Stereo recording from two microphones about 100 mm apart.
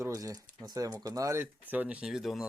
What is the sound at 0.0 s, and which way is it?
Speech, 35° right (ahead or behind).